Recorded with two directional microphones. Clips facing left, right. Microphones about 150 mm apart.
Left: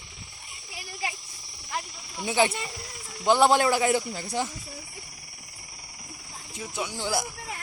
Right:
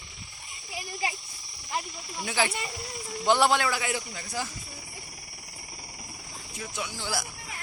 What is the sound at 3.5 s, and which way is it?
Speech, 35° left (ahead or behind).